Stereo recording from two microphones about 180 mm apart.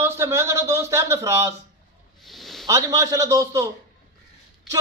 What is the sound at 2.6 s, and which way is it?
A man's voice, 15° right (ahead or behind).